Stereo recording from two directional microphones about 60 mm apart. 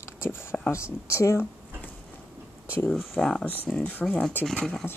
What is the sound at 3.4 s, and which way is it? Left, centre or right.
Speech, left.